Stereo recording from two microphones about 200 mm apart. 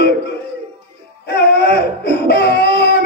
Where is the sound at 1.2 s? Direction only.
55° left (ahead or behind).